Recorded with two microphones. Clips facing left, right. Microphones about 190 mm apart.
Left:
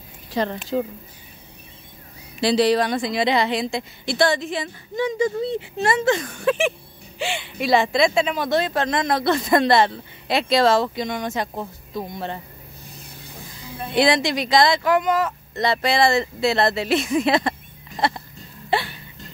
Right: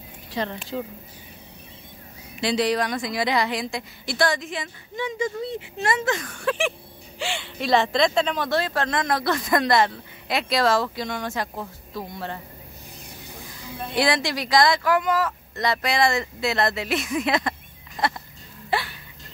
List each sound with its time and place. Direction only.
0.3 s speech: 40° left (ahead or behind)
2.4 s speech: 35° left (ahead or behind)
13.9 s speech: 20° left (ahead or behind)
18.7 s a sound: 25° left (ahead or behind)